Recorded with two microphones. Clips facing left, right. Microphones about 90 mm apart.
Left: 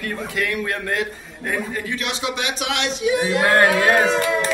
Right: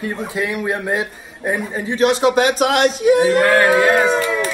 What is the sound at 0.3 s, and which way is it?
A man's voice, 20° right (ahead or behind).